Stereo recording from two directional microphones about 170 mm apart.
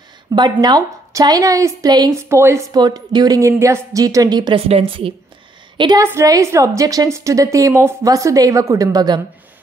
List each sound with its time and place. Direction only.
0.3 s a woman's voice: 25° right (ahead or behind)